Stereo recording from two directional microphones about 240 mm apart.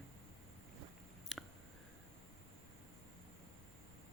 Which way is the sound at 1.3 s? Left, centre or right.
Centre.